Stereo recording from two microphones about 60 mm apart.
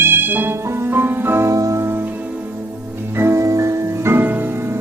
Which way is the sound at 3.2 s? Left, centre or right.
Right.